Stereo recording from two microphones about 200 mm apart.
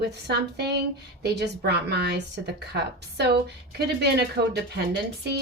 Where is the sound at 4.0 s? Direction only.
55° right (ahead or behind).